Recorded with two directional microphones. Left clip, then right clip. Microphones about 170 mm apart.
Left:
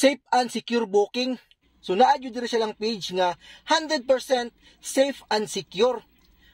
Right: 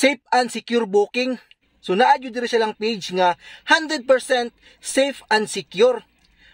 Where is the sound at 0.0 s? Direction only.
30° right (ahead or behind).